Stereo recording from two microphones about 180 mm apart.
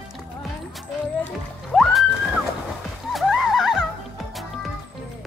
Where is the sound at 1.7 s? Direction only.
Centre (ahead or behind).